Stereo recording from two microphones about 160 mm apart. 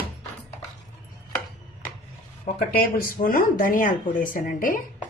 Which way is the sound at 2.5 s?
60° left (ahead or behind).